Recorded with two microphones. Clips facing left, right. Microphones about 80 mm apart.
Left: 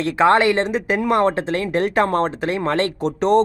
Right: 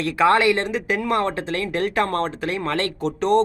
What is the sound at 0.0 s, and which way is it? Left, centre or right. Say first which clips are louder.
Speech: left 2 dB; left.